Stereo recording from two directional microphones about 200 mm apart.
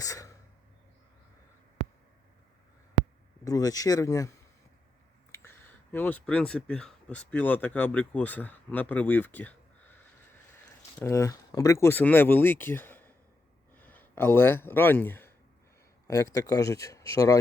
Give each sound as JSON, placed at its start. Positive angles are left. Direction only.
{"t": 0.0, "sound": "a sound", "side_deg": 15}
{"t": 3.4, "sound": "speech", "side_deg": 20}
{"t": 11.0, "sound": "speech", "side_deg": 15}